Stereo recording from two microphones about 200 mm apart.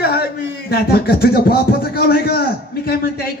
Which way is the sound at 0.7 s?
50° left (ahead or behind).